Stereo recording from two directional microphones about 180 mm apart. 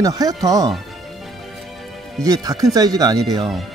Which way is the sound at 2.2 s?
20° right (ahead or behind).